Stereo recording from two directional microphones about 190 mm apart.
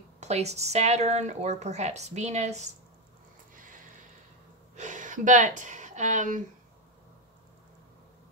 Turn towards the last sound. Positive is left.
turn(degrees=-40)  # may be behind; listen again after turning